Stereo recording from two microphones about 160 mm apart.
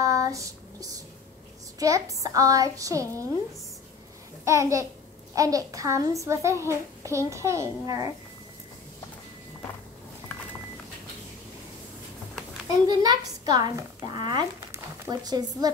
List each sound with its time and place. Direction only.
0.0 s a sound: 20° right (ahead or behind)
1.8 s a child's voice: 20° right (ahead or behind)
4.5 s a child's voice: 20° right (ahead or behind)
12.8 s a child's voice: 25° right (ahead or behind)